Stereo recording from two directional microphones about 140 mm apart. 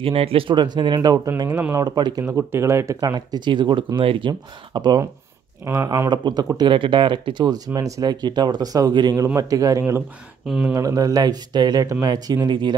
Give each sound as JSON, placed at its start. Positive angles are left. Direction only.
{"t": 0.0, "sound": "speech", "side_deg": -45}
{"t": 2.3, "sound": "speech", "side_deg": -20}
{"t": 5.7, "sound": "speech", "side_deg": -20}
{"t": 6.0, "sound": "speech", "side_deg": -30}
{"t": 10.4, "sound": "speech", "side_deg": 0}
{"t": 10.7, "sound": "speech", "side_deg": -25}